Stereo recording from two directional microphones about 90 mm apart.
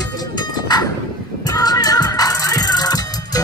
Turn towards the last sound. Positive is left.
turn(degrees=45)  # may be behind; listen again after turning